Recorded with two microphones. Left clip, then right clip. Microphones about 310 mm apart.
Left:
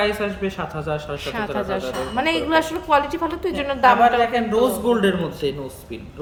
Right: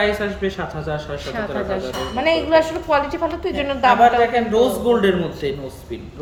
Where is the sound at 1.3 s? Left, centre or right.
Centre.